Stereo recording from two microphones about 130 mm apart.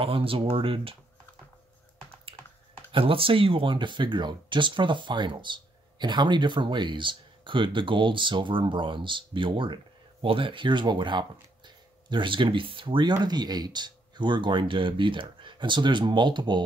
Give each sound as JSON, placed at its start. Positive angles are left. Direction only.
{"t": 0.0, "sound": "speech", "side_deg": -45}
{"t": 2.9, "sound": "speech", "side_deg": -45}